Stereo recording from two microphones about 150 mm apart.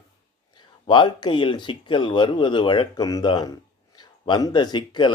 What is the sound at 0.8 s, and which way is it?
Speech, 30° left (ahead or behind).